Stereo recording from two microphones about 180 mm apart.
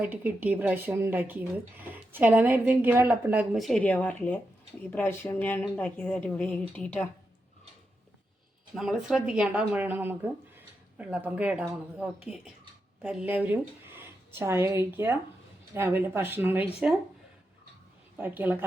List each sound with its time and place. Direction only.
0.0 s a woman's voice: 10° right (ahead or behind); by 7.1 s 10° left (ahead or behind)
8.7 s a woman's voice: 5° right (ahead or behind)
18.2 s a woman's voice: 10° right (ahead or behind)